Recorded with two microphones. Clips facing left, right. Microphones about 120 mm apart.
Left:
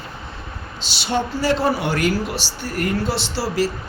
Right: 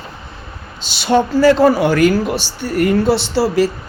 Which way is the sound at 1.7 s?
45° right (ahead or behind).